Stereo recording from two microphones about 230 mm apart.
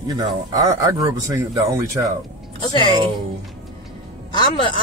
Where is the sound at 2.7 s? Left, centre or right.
Left.